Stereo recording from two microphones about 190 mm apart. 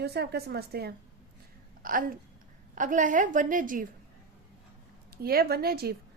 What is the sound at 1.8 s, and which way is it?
A woman's voice, 45° right (ahead or behind).